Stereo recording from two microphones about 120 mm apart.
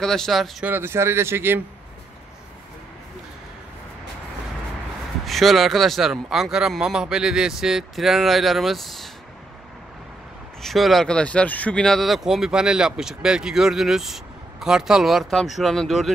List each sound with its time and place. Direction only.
0.0 s speech: 5° left (ahead or behind)
0.7 s speech: 20° right (ahead or behind)
5.2 s speech: centre (ahead or behind)
10.6 s speech: centre (ahead or behind)